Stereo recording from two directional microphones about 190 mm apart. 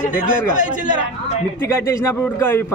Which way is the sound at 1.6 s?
15° left (ahead or behind).